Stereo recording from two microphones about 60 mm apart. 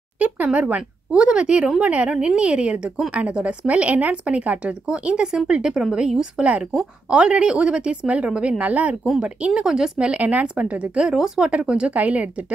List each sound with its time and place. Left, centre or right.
0.2 s a woman's voice: right
9.5 s a woman's voice: centre